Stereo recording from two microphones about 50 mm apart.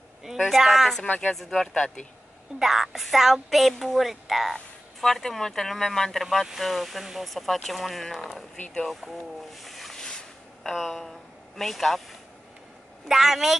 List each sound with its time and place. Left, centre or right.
0.6 s speech: centre
1.0 s speech: left
1.3 s speech: centre
2.6 s speech: centre
5.0 s speech: centre
6.4 s speech: centre
8.5 s speech: centre
8.8 s speech: centre
10.0 s a sound: centre
13.1 s a woman's voice: centre